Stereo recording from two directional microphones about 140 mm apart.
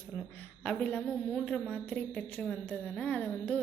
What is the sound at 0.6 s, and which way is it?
A woman's voice, 10° left (ahead or behind).